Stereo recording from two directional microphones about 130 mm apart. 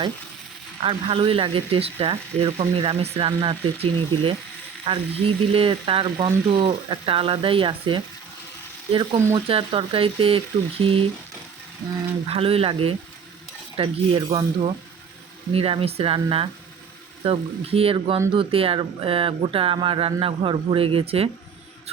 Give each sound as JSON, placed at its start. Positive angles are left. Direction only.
{"t": 0.8, "sound": "speech", "side_deg": -45}
{"t": 9.3, "sound": "speech", "side_deg": -45}
{"t": 12.3, "sound": "speech", "side_deg": -50}